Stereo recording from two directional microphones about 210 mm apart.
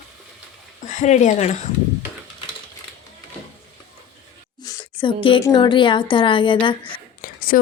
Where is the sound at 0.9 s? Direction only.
35° left (ahead or behind).